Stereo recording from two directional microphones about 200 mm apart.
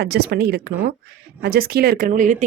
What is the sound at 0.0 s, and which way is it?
Speech, 55° right (ahead or behind).